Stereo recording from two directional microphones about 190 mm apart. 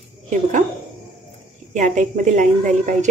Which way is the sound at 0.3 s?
40° right (ahead or behind).